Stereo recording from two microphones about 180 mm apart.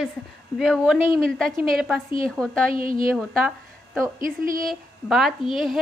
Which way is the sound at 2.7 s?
50° right (ahead or behind).